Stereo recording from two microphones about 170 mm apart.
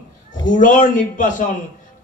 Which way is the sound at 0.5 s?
50° left (ahead or behind).